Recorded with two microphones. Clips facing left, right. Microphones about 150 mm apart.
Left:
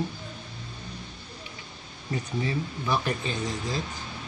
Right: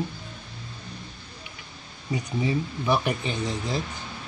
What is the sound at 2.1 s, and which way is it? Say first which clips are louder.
Speech: right 3 dB; 15° right (ahead or behind).